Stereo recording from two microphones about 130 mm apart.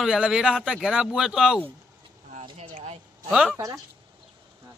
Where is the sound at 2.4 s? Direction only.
55° right (ahead or behind).